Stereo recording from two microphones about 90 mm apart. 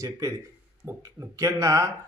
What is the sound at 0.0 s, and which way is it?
A man's voice, 40° right (ahead or behind).